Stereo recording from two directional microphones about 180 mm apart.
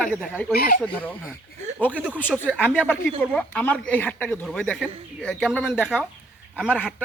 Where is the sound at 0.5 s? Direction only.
55° left (ahead or behind).